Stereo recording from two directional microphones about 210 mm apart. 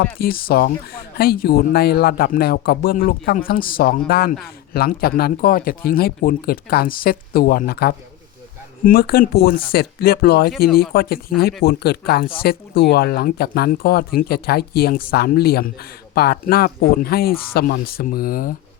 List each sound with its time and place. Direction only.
0.2 s speech: 45° left (ahead or behind)